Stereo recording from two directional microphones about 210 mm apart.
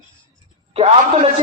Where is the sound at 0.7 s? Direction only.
30° right (ahead or behind).